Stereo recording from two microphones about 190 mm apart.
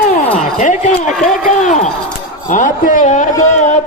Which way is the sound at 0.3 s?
40° left (ahead or behind).